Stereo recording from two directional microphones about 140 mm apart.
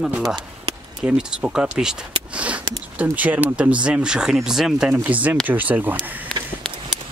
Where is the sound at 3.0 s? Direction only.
10° right (ahead or behind).